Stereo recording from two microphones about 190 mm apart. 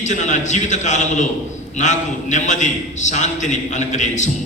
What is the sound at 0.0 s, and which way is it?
A man's voice, 40° left (ahead or behind).